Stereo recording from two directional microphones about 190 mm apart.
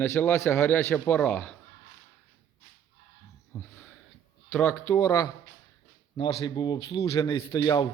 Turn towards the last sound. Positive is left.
turn(degrees=25)  # may be behind; listen again after turning